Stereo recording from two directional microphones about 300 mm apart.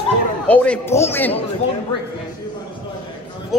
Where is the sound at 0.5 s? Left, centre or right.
Centre.